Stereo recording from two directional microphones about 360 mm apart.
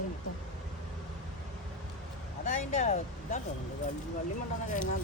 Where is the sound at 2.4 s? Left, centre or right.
Centre.